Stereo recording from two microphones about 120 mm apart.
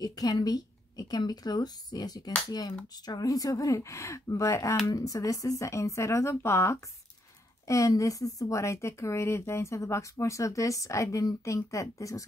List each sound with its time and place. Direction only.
0.0 s speech: 30° left (ahead or behind)